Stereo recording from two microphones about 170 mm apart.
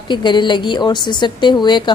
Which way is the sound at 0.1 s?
25° left (ahead or behind).